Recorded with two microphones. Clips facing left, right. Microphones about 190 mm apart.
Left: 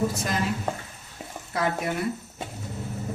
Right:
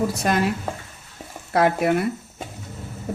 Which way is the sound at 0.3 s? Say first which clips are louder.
Right 7 dB; 70° right (ahead or behind).